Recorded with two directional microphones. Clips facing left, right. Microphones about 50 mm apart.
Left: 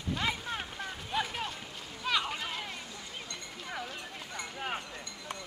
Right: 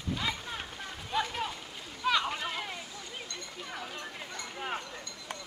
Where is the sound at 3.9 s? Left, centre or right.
Centre.